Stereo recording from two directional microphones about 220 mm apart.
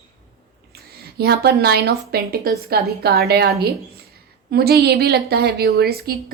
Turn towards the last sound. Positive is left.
turn(degrees=-45)  # may be behind; listen again after turning